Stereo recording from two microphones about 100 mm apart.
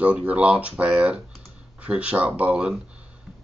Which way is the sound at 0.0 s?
15° right (ahead or behind).